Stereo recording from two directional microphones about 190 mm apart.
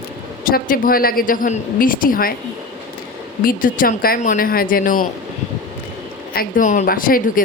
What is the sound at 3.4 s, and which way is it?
A woman's voice, 45° left (ahead or behind).